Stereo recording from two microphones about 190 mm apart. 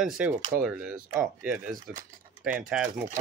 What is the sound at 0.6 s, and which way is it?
Speech, centre (ahead or behind).